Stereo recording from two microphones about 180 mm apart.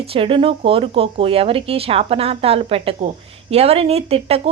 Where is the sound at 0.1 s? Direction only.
30° right (ahead or behind).